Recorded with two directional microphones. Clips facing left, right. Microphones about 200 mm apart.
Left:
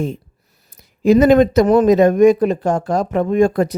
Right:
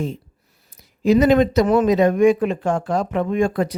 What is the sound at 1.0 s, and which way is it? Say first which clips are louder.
Speech: left 4 dB; 50° left (ahead or behind).